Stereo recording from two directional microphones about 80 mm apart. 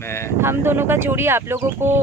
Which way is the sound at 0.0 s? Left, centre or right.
Left.